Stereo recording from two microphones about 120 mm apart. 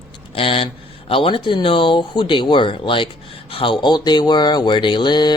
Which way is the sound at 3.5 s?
45° left (ahead or behind).